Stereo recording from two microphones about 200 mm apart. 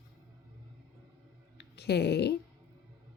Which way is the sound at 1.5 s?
55° left (ahead or behind).